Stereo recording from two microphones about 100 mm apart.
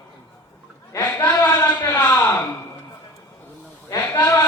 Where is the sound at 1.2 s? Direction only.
20° left (ahead or behind).